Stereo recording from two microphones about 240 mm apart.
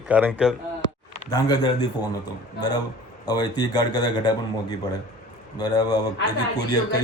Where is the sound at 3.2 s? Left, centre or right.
Centre.